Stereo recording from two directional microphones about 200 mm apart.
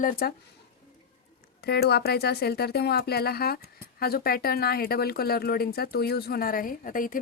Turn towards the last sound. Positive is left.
turn(degrees=45)  # may be behind; listen again after turning